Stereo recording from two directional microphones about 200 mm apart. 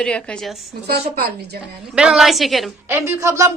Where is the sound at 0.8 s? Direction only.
55° right (ahead or behind).